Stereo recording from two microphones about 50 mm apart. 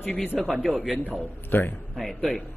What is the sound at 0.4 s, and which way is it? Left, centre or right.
Speech, centre.